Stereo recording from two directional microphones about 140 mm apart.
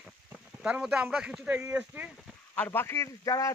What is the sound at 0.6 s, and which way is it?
Speech, 5° right (ahead or behind).